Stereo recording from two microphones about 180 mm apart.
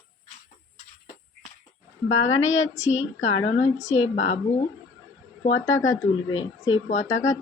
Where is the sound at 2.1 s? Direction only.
90° left.